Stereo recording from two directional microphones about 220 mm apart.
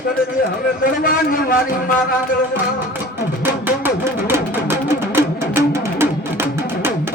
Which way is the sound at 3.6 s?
10° right (ahead or behind).